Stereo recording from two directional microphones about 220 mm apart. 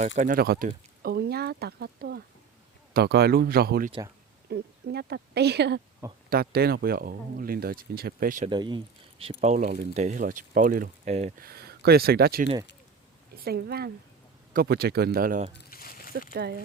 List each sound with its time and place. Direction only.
0.2 s speech: 40° right (ahead or behind)
8.4 s speech: 20° right (ahead or behind)
15.5 s a sound: 40° left (ahead or behind)
16.3 s speech: 45° right (ahead or behind)